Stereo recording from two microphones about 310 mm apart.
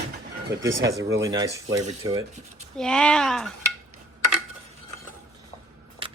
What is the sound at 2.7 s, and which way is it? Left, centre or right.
Speech, centre.